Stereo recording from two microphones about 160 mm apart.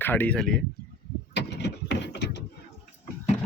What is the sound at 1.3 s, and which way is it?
Vehicle, 90° left.